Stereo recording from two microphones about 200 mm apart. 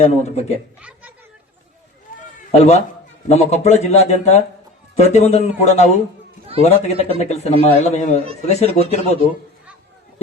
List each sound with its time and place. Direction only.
0.0 s speech: 35° left (ahead or behind)
0.8 s speech: 5° right (ahead or behind)
2.1 s a sound: 40° left (ahead or behind)
2.5 s speech: 35° left (ahead or behind)